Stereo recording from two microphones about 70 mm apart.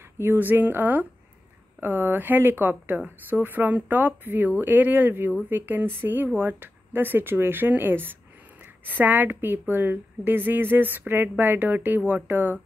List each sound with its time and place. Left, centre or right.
0.2 s a woman's voice: right